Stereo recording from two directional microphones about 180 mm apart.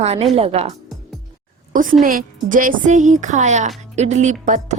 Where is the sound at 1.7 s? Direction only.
45° right (ahead or behind).